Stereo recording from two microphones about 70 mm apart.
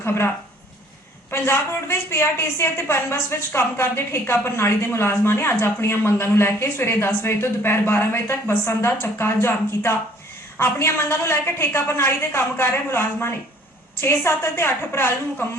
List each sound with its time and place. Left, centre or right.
0.0 s speech: left
1.3 s a woman's voice: left